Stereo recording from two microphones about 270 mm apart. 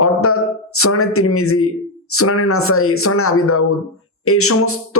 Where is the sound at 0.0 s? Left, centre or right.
Left.